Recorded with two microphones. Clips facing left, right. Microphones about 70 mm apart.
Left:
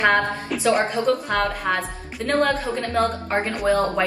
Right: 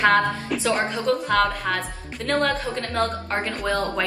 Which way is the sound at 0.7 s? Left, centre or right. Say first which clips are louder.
Left 3 dB; centre.